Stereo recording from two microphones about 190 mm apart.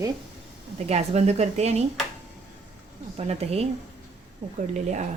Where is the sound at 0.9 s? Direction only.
35° right (ahead or behind).